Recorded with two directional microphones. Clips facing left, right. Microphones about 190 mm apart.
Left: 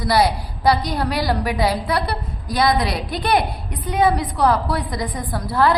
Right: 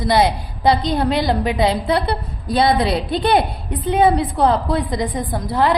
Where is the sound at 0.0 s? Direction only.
20° right (ahead or behind).